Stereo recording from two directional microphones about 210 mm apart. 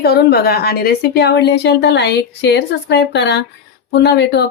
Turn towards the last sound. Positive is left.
turn(degrees=55)  # may be behind; listen again after turning